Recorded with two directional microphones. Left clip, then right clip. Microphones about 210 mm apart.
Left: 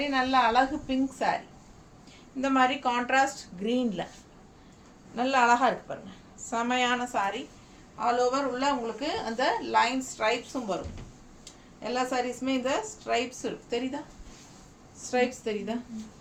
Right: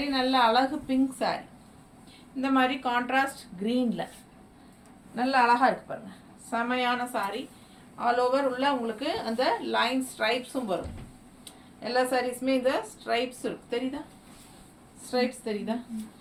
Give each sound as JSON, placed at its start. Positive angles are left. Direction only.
{"t": 0.1, "sound": "a woman's voice", "side_deg": 15}
{"t": 2.4, "sound": "a woman's voice", "side_deg": 20}
{"t": 5.1, "sound": "a woman's voice", "side_deg": 20}
{"t": 11.8, "sound": "a woman's voice", "side_deg": 15}
{"t": 15.1, "sound": "a woman's voice", "side_deg": 20}